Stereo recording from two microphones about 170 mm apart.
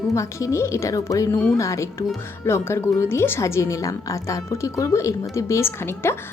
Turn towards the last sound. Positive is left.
turn(degrees=15)  # may be behind; listen again after turning